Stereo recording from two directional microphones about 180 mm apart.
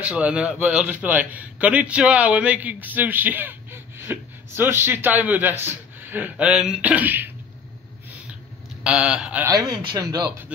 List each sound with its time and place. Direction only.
0.0 s a man's voice: 5° right (ahead or behind)
8.8 s honk: 5° right (ahead or behind)
9.5 s speech: 20° right (ahead or behind)